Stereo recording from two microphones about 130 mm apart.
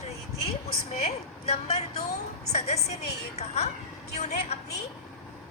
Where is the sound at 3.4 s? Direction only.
55° left (ahead or behind).